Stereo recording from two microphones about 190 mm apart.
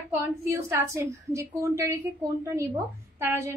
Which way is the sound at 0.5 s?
15° right (ahead or behind).